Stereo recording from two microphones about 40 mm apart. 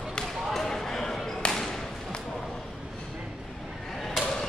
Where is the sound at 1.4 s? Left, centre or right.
Left.